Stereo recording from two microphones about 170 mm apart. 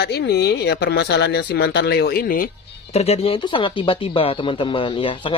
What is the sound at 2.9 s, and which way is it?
Speech, 35° left (ahead or behind).